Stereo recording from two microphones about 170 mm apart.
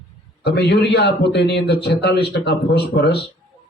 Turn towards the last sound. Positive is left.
turn(degrees=75)  # may be behind; listen again after turning